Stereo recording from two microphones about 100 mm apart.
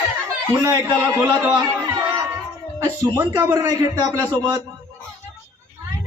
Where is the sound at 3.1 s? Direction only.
20° right (ahead or behind).